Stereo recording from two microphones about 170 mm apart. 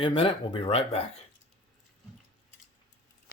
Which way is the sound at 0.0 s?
30° left (ahead or behind).